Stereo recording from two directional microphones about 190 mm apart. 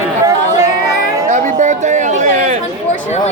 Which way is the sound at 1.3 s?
40° right (ahead or behind).